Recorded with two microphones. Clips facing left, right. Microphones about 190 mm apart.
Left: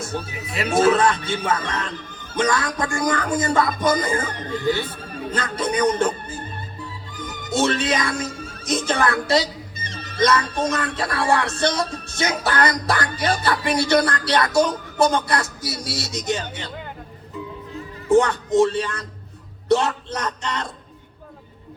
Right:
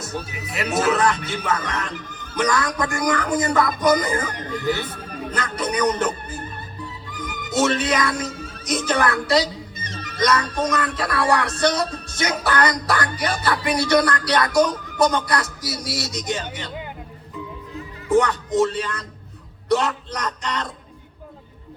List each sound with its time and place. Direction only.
0.0 s music: 25° left (ahead or behind)
5.3 s speech: 25° left (ahead or behind)
7.3 s music: 25° left (ahead or behind)
18.1 s music: 25° left (ahead or behind)